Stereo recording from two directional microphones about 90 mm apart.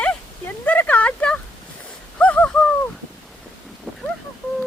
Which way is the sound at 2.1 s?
15° left (ahead or behind).